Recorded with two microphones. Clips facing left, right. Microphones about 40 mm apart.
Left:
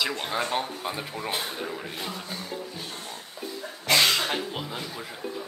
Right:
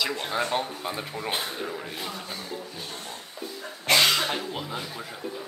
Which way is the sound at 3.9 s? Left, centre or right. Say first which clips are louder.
Right 1 dB; centre.